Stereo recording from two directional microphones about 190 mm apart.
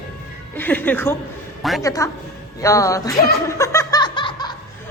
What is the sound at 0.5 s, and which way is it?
Speech, 10° left (ahead or behind).